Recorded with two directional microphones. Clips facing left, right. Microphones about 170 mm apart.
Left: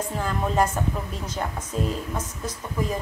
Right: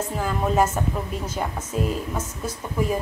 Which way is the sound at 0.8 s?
5° right (ahead or behind).